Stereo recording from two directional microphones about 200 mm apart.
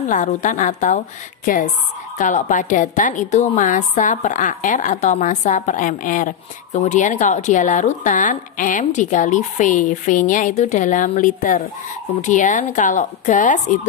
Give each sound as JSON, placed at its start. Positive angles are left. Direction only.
{"t": 0.1, "sound": "a woman's voice", "side_deg": 40}